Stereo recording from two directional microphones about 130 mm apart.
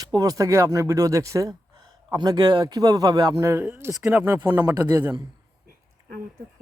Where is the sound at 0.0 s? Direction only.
30° right (ahead or behind).